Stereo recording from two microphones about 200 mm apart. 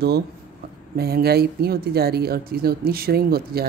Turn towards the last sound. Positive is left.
turn(degrees=-50)  # may be behind; listen again after turning